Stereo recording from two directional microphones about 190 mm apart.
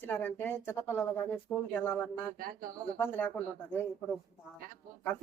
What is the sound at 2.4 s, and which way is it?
Speech, 50° right (ahead or behind).